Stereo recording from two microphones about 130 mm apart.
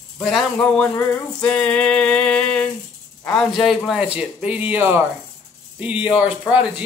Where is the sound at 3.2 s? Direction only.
Centre (ahead or behind); by 5.0 s 15° right (ahead or behind).